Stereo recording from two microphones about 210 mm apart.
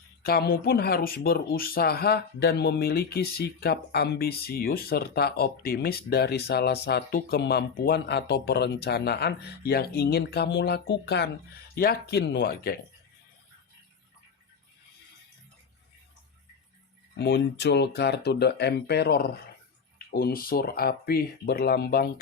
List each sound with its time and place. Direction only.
0.2 s speech: 45° left (ahead or behind)
17.2 s speech: 55° left (ahead or behind)